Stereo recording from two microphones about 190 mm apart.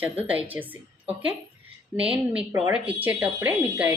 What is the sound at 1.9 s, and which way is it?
Speech, 5° right (ahead or behind).